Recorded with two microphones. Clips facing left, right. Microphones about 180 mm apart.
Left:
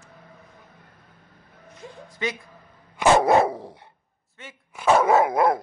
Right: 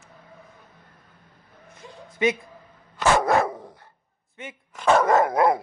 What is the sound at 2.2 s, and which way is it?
Speech, 20° right (ahead or behind).